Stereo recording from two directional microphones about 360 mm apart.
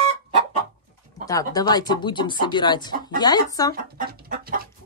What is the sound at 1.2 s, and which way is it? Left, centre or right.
Speech, centre.